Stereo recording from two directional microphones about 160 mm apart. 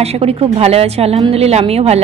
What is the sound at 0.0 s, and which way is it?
A woman's voice, 40° right (ahead or behind).